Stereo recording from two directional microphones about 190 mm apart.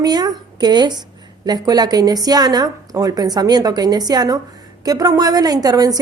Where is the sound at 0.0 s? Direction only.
20° right (ahead or behind).